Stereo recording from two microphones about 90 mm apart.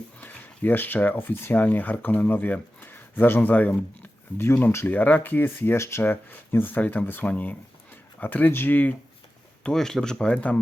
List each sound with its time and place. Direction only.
0.2 s speech: 20° left (ahead or behind)
9.6 s speech: 5° left (ahead or behind)